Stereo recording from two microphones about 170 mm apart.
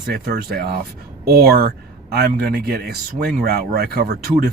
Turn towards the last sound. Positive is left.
turn(degrees=-65)  # may be behind; listen again after turning